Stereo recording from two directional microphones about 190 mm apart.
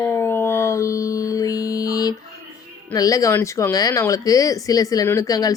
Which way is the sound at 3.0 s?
20° left (ahead or behind).